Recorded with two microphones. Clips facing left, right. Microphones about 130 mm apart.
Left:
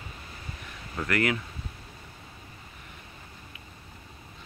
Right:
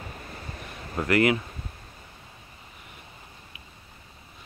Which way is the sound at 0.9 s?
25° right (ahead or behind).